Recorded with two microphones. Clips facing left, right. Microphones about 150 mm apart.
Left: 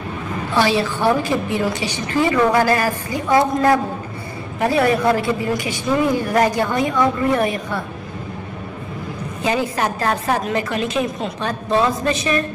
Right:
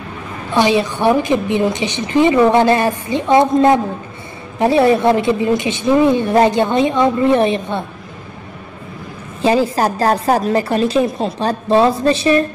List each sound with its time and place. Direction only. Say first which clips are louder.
0.6 s a woman's voice: right 4 dB; 20° right (ahead or behind)
9.4 s a woman's voice: right 6 dB; 30° right (ahead or behind)